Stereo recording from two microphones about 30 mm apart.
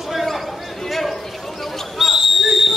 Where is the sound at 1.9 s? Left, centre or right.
Centre.